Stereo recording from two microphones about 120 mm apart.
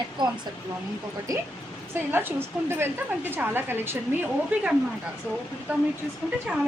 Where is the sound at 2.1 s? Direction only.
20° right (ahead or behind).